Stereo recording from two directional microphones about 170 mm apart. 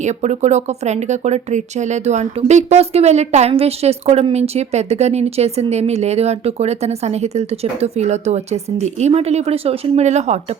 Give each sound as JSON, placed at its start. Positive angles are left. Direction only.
{"t": 0.0, "sound": "speech", "side_deg": -45}